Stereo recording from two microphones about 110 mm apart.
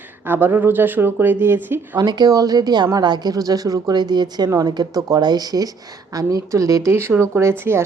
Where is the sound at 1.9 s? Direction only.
40° right (ahead or behind).